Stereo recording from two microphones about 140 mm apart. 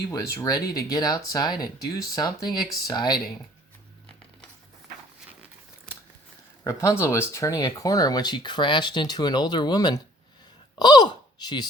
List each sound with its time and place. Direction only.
0.1 s speech: 25° left (ahead or behind)
6.7 s speech: 20° left (ahead or behind)